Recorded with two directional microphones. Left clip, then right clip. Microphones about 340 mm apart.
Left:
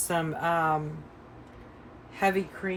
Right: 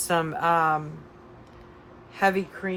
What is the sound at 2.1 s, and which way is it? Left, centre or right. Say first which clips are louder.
Speech: right 3 dB; centre.